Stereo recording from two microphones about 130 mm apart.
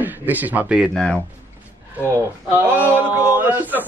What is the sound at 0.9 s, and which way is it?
Speech, 5° left (ahead or behind).